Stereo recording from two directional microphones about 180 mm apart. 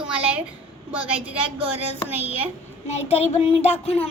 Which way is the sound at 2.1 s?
10° right (ahead or behind).